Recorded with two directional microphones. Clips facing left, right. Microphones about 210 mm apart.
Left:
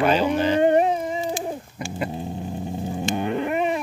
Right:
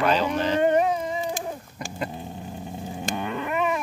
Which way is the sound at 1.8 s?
5° left (ahead or behind).